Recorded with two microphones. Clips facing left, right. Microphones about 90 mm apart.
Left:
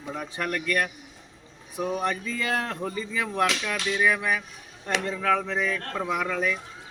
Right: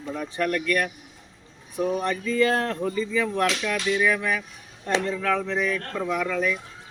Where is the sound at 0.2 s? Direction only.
15° left (ahead or behind).